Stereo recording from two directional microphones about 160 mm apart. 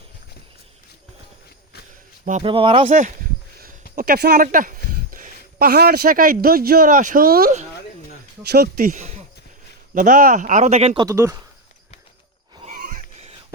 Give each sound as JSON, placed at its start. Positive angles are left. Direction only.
{"t": 2.4, "sound": "speech", "side_deg": -30}
{"t": 3.9, "sound": "speech", "side_deg": -70}
{"t": 8.4, "sound": "speech", "side_deg": -80}
{"t": 11.0, "sound": "speech", "side_deg": -20}
{"t": 12.7, "sound": "neigh", "side_deg": -55}